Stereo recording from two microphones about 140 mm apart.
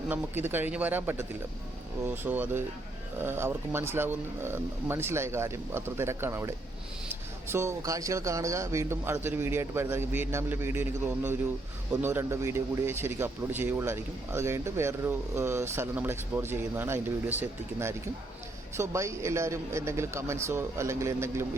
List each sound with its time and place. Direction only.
0.1 s a man's voice: 15° right (ahead or behind)